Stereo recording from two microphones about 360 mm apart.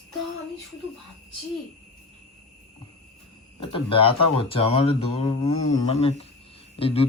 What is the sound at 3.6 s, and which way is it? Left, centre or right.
Speech, centre.